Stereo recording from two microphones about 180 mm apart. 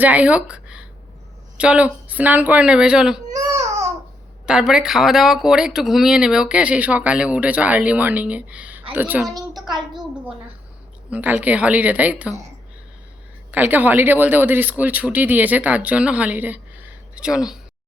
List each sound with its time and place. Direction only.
0.0 s speech: 10° right (ahead or behind)
3.3 s baby cry: 20° right (ahead or behind)
4.4 s speech: 5° right (ahead or behind)
11.1 s speech: 10° right (ahead or behind)
13.5 s speech: 10° right (ahead or behind)